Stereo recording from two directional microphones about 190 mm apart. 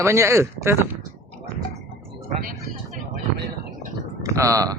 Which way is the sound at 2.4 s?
50° right (ahead or behind).